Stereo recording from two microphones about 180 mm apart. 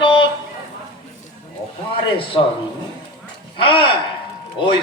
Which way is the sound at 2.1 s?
30° left (ahead or behind).